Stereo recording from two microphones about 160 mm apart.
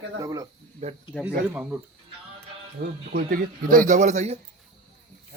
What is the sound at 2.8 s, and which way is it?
Speech, 65° right (ahead or behind).